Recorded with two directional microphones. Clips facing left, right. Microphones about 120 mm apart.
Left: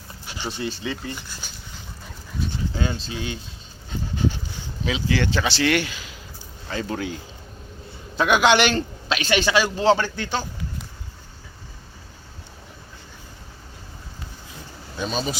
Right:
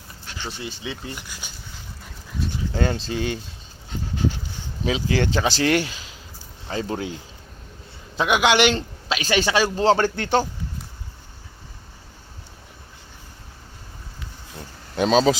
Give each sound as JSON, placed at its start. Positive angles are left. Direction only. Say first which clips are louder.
{"t": 0.3, "sound": "a sound", "louder": "left 2 dB", "side_deg": 10}
{"t": 0.6, "sound": "speech", "louder": "left 6 dB", "side_deg": -15}
{"t": 2.4, "sound": "dog", "louder": "right 1 dB", "side_deg": 0}
{"t": 2.7, "sound": "speech", "louder": "right 7 dB", "side_deg": -55}
{"t": 4.9, "sound": "a man's voice", "louder": "right 1 dB", "side_deg": -40}
{"t": 9.3, "sound": "speech", "louder": "even", "side_deg": -35}
{"t": 14.9, "sound": "speech", "louder": "right 10 dB", "side_deg": -90}